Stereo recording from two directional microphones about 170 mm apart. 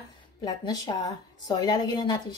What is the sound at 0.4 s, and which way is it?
A woman's voice, 25° left (ahead or behind).